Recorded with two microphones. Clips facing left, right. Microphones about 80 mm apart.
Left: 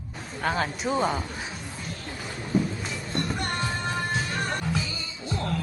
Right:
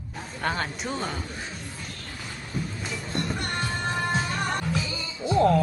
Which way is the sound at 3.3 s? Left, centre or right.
Left.